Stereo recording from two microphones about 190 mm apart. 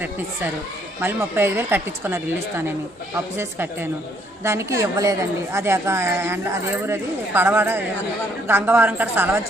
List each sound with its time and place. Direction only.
1.0 s speech: 10° right (ahead or behind)